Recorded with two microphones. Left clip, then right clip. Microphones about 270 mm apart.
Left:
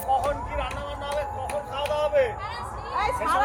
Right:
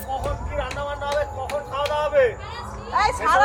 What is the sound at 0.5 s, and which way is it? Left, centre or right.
Speech, centre.